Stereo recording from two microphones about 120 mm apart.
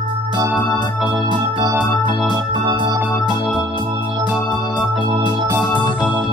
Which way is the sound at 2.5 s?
40° right (ahead or behind).